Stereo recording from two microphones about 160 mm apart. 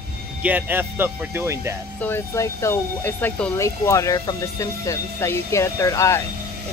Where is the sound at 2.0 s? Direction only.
15° left (ahead or behind).